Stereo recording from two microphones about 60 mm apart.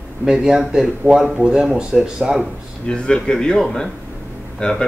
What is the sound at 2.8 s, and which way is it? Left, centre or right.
A man's voice, centre.